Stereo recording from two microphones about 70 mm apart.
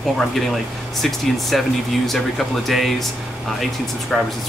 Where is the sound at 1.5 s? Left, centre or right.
Centre.